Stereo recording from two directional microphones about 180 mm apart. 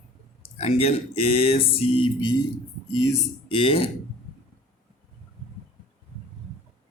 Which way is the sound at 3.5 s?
30° left (ahead or behind).